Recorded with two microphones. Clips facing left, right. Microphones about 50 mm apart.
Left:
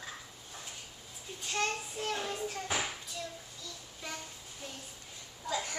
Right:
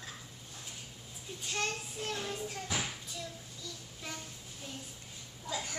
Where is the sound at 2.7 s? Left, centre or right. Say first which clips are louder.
Left 2 dB; centre.